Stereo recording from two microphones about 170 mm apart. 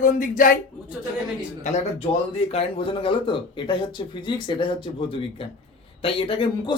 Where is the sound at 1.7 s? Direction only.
45° left (ahead or behind).